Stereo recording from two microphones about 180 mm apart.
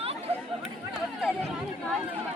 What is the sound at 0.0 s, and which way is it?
Chatter, 35° right (ahead or behind).